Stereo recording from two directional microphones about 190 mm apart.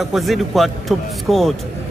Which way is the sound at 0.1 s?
Centre (ahead or behind).